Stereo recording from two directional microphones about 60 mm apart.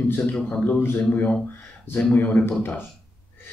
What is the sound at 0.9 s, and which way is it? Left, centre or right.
A man's voice, left.